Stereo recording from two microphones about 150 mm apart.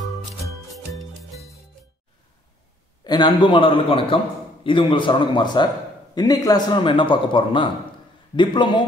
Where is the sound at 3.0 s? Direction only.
30° left (ahead or behind).